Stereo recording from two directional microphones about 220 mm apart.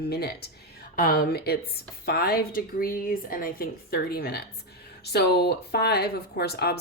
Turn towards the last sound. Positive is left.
turn(degrees=45)  # may be behind; listen again after turning